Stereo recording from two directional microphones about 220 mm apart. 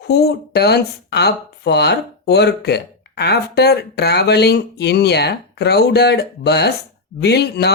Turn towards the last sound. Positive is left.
turn(degrees=50)  # may be behind; listen again after turning